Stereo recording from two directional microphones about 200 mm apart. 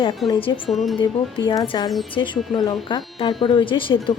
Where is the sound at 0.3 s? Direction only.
25° left (ahead or behind).